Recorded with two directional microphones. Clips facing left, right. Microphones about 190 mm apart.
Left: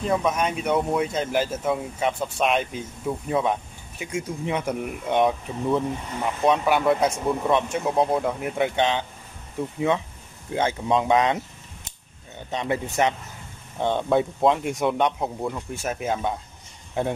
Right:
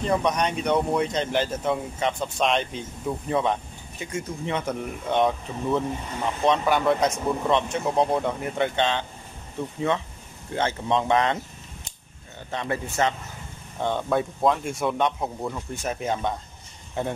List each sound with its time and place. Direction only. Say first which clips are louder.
0.0 s speech: even; 5° left (ahead or behind)
12.4 s speech: left 2 dB; 15° left (ahead or behind)